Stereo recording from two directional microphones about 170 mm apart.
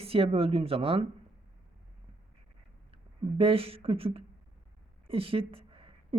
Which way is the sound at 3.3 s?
35° right (ahead or behind).